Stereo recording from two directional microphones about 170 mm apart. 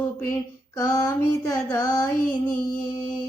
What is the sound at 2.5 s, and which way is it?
Music, 55° left (ahead or behind).